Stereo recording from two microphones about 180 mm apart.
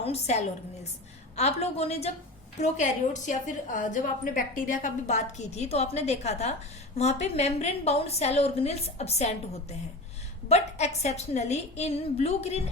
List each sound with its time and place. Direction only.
0.0 s a woman's voice: 35° left (ahead or behind)
10.5 s a woman's voice: 40° left (ahead or behind)